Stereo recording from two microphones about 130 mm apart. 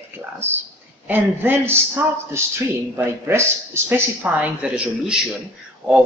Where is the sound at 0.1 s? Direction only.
15° right (ahead or behind).